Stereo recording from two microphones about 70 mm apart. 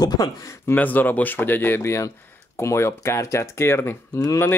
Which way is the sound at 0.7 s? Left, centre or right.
Left.